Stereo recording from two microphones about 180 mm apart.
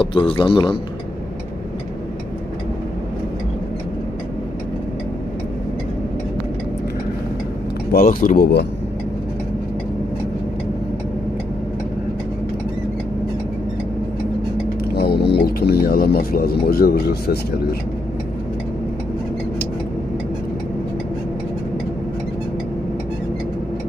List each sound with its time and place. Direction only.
0.0 s a man's voice: 30° left (ahead or behind)
7.9 s speech: 50° left (ahead or behind)
15.0 s music: 65° left (ahead or behind)